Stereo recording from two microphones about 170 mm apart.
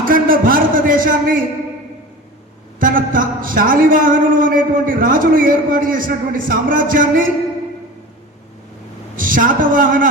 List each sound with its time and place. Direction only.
0.0 s a man's voice: 55° right (ahead or behind)
2.8 s a man's voice: 55° right (ahead or behind)
9.1 s a man's voice: 55° right (ahead or behind)